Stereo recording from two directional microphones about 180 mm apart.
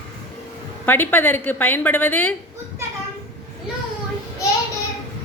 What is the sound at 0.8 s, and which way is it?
A woman's voice, 10° left (ahead or behind).